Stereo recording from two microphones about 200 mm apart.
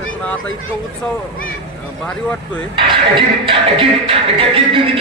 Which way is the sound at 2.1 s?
5° left (ahead or behind).